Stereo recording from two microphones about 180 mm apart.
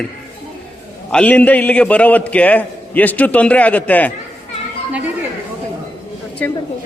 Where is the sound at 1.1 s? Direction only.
5° left (ahead or behind).